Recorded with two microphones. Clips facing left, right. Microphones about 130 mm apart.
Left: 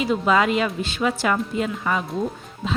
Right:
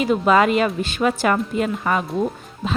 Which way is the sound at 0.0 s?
50° right (ahead or behind).